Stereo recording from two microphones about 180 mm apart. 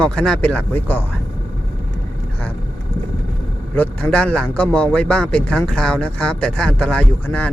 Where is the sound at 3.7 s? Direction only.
10° left (ahead or behind).